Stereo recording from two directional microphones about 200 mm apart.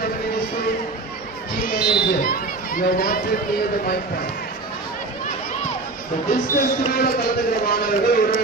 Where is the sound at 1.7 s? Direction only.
50° left (ahead or behind).